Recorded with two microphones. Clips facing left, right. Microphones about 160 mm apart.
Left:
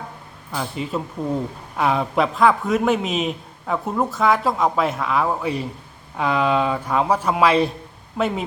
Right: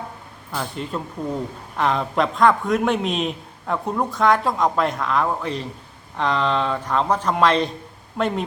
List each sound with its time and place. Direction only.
0.5 s a man's voice: 5° left (ahead or behind)